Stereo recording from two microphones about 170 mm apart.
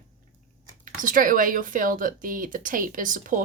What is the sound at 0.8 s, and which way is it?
Speech, 55° right (ahead or behind).